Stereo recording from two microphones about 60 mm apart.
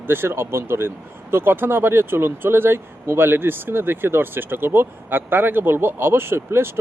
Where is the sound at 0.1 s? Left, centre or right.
Right.